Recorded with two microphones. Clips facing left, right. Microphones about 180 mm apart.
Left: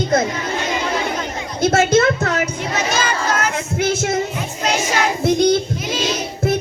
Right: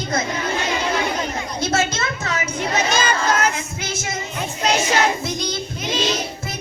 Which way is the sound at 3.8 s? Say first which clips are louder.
Left 13 dB; 55° left (ahead or behind).